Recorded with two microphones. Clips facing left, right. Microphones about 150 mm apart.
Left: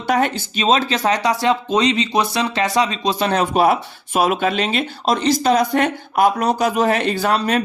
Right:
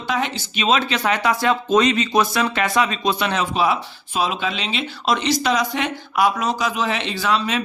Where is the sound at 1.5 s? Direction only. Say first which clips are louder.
Right 1 dB; 20° left (ahead or behind).